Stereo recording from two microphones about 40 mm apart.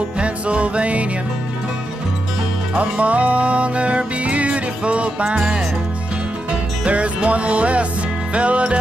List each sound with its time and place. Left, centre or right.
0.2 s music: right
2.8 s music: right
6.8 s music: right